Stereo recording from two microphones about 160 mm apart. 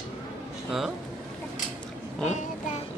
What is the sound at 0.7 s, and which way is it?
Speech, centre (ahead or behind).